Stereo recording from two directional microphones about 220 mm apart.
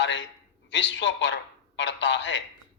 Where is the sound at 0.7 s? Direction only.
55° left (ahead or behind).